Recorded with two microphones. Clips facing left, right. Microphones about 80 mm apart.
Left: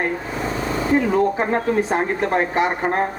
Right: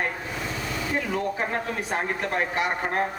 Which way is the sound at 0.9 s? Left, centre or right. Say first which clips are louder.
Left 10 dB; left.